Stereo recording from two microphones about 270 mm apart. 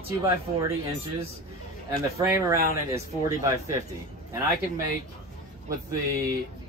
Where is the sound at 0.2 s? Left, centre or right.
Centre.